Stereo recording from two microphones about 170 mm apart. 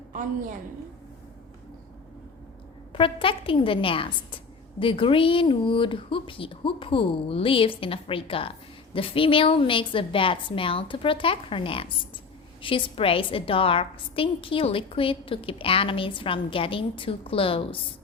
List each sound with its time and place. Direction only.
2.9 s speech: 30° left (ahead or behind)